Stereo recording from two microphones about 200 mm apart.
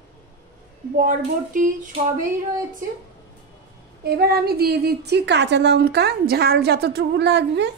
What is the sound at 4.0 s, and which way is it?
Speech, 50° right (ahead or behind).